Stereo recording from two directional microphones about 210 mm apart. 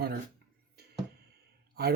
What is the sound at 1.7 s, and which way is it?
Speech, 50° right (ahead or behind).